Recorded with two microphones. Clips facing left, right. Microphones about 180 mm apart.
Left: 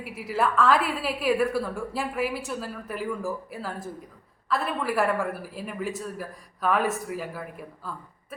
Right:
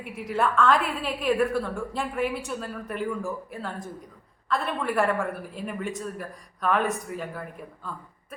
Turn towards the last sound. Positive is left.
turn(degrees=5)  # may be behind; listen again after turning